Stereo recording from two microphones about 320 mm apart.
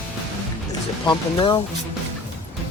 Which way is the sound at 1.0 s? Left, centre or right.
Centre.